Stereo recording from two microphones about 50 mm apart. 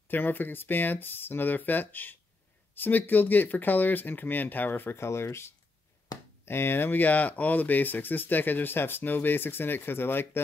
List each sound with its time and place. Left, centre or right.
0.1 s speech: left
4.9 s speech: left